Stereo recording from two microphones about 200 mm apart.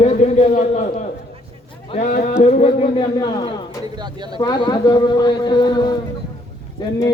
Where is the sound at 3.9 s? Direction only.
20° right (ahead or behind).